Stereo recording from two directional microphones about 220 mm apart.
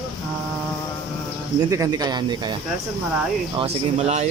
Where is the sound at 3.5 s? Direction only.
30° right (ahead or behind).